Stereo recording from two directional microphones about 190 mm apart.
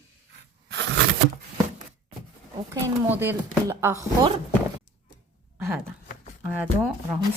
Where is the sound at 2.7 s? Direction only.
10° right (ahead or behind).